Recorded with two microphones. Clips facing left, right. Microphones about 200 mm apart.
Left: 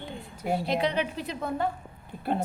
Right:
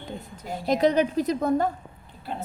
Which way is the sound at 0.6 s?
40° right (ahead or behind).